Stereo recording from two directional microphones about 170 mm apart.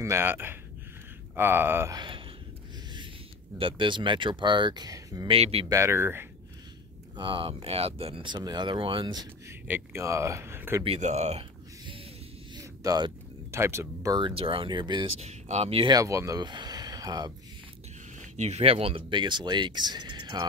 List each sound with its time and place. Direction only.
0.0 s speech: 15° right (ahead or behind)
2.0 s speech: 30° right (ahead or behind)
3.5 s speech: 30° right (ahead or behind)
5.3 s speech: 35° right (ahead or behind)
5.7 s speech: 15° right (ahead or behind)
7.2 s speech: 30° right (ahead or behind)
9.7 s speech: 15° right (ahead or behind)
10.8 s speech: 40° right (ahead or behind)
12.5 s speech: 25° right (ahead or behind)
15.1 s speech: 40° right (ahead or behind)
15.9 s speech: 20° right (ahead or behind)
18.3 s speech: 40° right (ahead or behind); by 20.4 s 25° right (ahead or behind)